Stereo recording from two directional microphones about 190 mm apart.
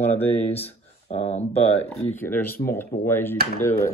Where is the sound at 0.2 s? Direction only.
10° left (ahead or behind).